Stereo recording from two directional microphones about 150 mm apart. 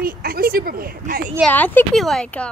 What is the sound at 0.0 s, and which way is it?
Speech, 75° right (ahead or behind).